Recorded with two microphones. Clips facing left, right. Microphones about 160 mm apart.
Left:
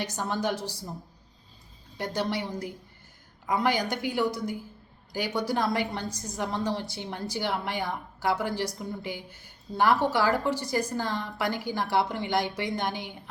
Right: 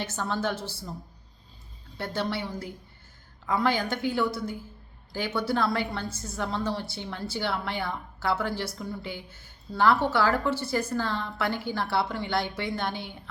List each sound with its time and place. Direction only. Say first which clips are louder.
0.0 s a woman's voice: even; 15° left (ahead or behind)
2.0 s a woman's voice: left 1 dB; 15° left (ahead or behind)